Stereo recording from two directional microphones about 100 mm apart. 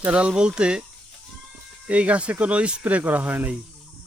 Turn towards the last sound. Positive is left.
turn(degrees=-15)  # may be behind; listen again after turning